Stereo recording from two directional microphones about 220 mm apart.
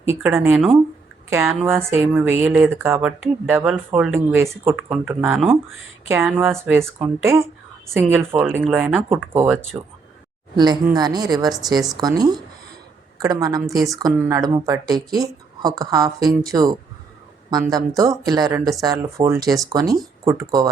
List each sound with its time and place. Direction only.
0.2 s a woman's voice: 10° right (ahead or behind)